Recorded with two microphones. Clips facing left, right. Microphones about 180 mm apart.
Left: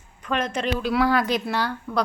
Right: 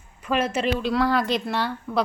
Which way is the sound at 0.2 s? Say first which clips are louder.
Right 2 dB; 5° right (ahead or behind).